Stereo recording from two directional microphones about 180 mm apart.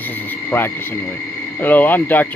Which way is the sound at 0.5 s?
15° left (ahead or behind).